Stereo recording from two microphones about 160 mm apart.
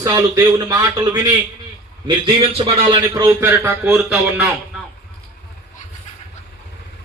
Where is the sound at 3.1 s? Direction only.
20° right (ahead or behind).